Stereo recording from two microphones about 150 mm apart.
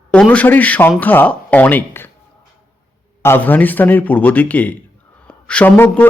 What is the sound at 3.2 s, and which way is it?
A man's voice, 15° left (ahead or behind).